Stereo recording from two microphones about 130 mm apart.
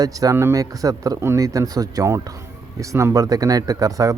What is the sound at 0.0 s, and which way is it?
Speech, 25° right (ahead or behind).